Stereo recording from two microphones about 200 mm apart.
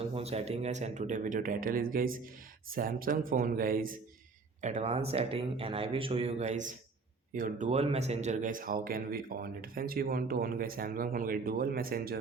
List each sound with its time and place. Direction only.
0.1 s speech: 30° right (ahead or behind)
4.6 s speech: 35° right (ahead or behind)